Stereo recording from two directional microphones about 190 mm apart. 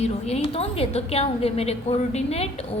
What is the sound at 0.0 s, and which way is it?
A woman's voice, 35° left (ahead or behind).